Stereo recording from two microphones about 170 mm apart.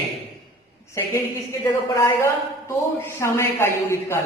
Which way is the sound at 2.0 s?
15° left (ahead or behind).